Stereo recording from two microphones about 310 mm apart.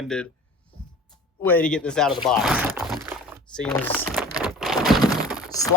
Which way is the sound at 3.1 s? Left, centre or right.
Centre.